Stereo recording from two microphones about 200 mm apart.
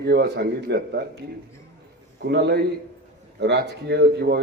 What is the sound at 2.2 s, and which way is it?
A man's voice, 55° right (ahead or behind).